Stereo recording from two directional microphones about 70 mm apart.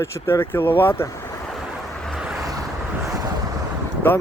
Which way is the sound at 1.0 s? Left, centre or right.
Left.